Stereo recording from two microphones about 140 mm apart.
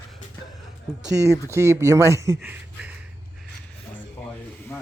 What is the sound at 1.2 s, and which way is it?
Speech, 20° right (ahead or behind).